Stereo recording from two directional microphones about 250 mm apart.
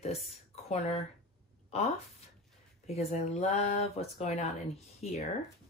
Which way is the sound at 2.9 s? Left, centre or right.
Left.